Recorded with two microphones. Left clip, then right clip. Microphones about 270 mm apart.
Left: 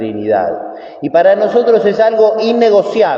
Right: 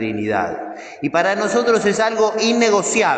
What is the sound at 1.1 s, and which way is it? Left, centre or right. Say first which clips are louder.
Speech: left 9 dB; right.